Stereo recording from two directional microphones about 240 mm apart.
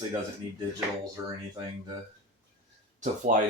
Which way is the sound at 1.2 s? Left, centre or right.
Centre.